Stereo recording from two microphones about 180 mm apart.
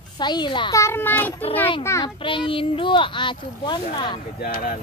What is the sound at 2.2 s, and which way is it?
Speech, 30° left (ahead or behind).